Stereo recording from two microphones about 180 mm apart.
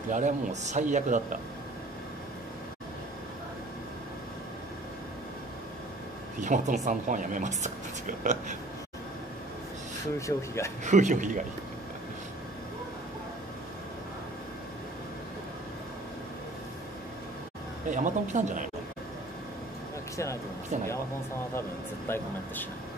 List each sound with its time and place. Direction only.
0.1 s speech: 40° right (ahead or behind)
6.4 s speech: 45° right (ahead or behind)
10.1 s speech: 15° left (ahead or behind)
10.8 s speech: 40° right (ahead or behind)
17.8 s speech: 45° right (ahead or behind)
21.5 s speech: 15° left (ahead or behind)